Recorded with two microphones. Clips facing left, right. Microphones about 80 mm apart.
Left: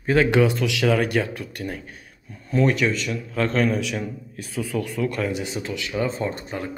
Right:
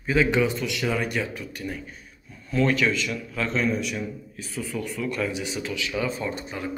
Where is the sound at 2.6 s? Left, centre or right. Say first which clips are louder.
Left 2 dB; left.